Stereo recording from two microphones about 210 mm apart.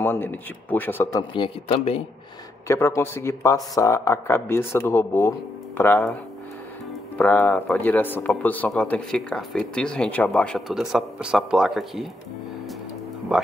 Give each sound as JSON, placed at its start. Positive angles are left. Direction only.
{"t": 0.0, "sound": "speech", "side_deg": 10}
{"t": 1.3, "sound": "a man's voice", "side_deg": 25}
{"t": 2.7, "sound": "speech", "side_deg": 10}
{"t": 7.2, "sound": "speech", "side_deg": 10}
{"t": 13.3, "sound": "speech", "side_deg": -5}